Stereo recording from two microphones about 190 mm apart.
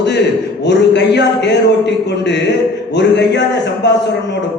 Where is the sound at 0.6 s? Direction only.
65° left (ahead or behind).